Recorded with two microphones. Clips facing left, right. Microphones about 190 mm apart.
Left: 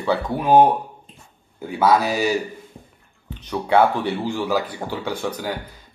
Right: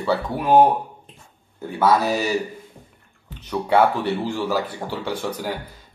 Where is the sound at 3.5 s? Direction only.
5° right (ahead or behind).